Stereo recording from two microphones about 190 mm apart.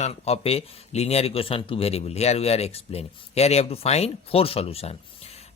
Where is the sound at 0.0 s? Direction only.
30° left (ahead or behind).